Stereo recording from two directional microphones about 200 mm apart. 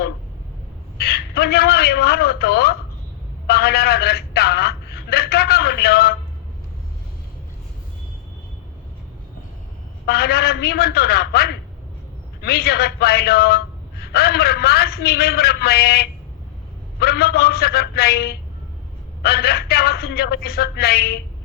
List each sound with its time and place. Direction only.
0.9 s a man's voice: 50° left (ahead or behind)
3.4 s a sound: 50° left (ahead or behind)
10.1 s a man's voice: 50° left (ahead or behind)